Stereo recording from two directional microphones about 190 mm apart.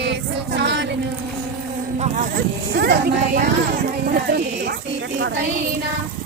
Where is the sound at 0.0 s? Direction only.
65° right (ahead or behind).